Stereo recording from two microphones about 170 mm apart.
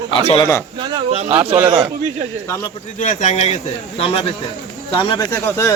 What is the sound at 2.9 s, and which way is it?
A man's voice, 45° left (ahead or behind).